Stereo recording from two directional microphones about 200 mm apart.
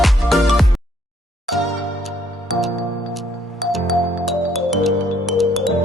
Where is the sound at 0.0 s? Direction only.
Centre (ahead or behind).